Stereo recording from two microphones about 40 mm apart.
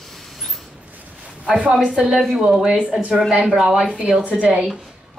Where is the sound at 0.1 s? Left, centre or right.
Centre.